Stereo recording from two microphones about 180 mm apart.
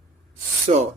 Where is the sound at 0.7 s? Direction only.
40° right (ahead or behind).